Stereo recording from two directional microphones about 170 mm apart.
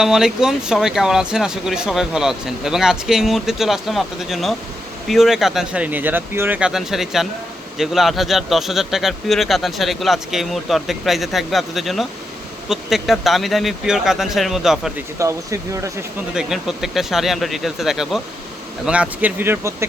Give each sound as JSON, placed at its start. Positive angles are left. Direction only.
{"t": 0.0, "sound": "speech", "side_deg": -5}
{"t": 15.2, "sound": "speech", "side_deg": -15}
{"t": 16.3, "sound": "speech", "side_deg": -5}